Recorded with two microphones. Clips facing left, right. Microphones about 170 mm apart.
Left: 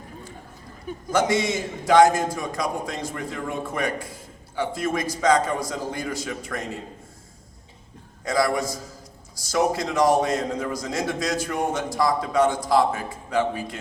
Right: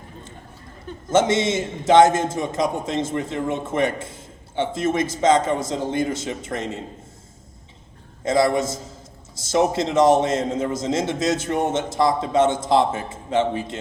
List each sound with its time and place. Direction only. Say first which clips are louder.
1.1 s a man's voice: right 3 dB; 25° right (ahead or behind)
8.2 s a man's voice: right 4 dB; 25° right (ahead or behind)